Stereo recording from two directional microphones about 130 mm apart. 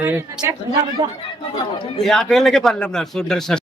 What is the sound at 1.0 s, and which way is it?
Speech, 35° right (ahead or behind).